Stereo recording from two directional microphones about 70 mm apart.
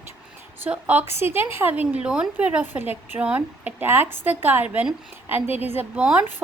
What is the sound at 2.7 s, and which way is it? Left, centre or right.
Speech, right.